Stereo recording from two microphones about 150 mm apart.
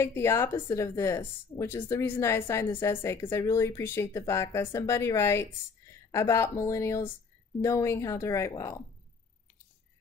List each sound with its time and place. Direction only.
0.0 s speech: 15° left (ahead or behind)